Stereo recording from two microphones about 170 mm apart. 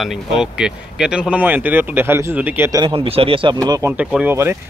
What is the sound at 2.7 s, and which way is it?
Speech, 30° right (ahead or behind).